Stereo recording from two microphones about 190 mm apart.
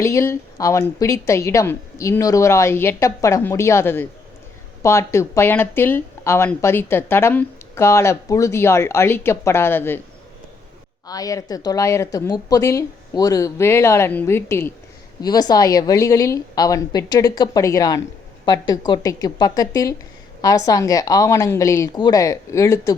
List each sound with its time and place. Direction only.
0.0 s speech: 15° left (ahead or behind)
11.0 s a woman's voice: 20° left (ahead or behind)